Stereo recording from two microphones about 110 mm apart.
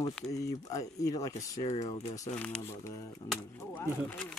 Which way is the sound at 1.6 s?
90° left.